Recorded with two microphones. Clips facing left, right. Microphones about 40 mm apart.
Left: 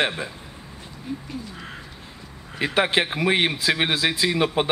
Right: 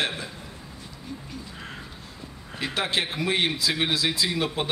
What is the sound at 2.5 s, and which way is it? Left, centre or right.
Speech, left.